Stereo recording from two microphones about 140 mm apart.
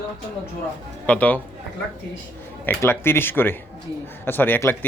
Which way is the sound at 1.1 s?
10° left (ahead or behind).